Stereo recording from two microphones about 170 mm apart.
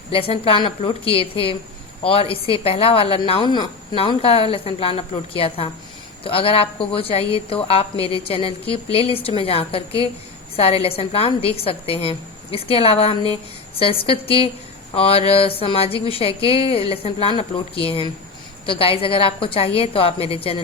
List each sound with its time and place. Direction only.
0.1 s a woman's voice: 35° left (ahead or behind)